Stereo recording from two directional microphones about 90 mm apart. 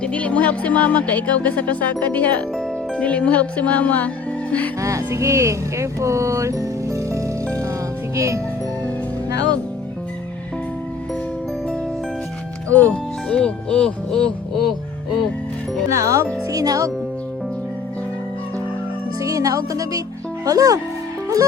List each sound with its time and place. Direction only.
0.0 s speech: 15° left (ahead or behind)
4.8 s speech: 35° right (ahead or behind)
12.7 s speech: 15° left (ahead or behind)
14.6 s music: centre (ahead or behind)
15.9 s a child's voice: 35° right (ahead or behind)
19.2 s speech: 40° right (ahead or behind)